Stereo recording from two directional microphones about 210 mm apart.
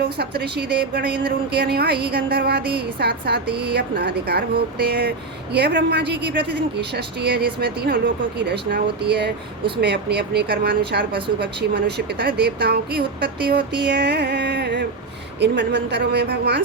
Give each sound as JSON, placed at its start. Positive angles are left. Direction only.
{"t": 0.0, "sound": "speech", "side_deg": -50}